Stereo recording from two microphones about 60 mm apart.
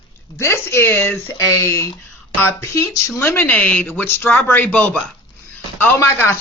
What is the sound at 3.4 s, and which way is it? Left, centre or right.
A woman's voice, left.